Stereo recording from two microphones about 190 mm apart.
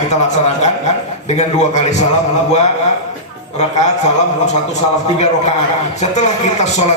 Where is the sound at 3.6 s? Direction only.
35° left (ahead or behind).